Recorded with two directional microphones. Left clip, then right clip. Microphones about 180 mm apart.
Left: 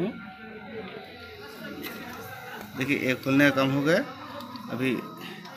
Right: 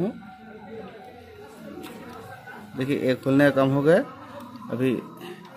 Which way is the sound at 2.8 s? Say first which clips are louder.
Right 2 dB; 45° right (ahead or behind).